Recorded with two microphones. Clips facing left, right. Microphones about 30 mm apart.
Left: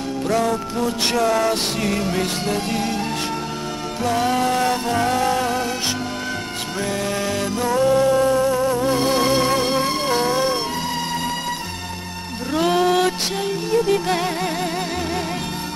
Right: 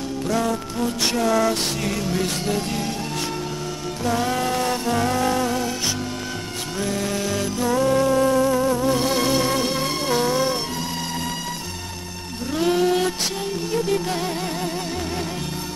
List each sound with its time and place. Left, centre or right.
0.3 s music: left
1.5 s music: left
4.0 s music: left
6.8 s music: left
7.6 s music: left
12.5 s music: left
13.9 s music: left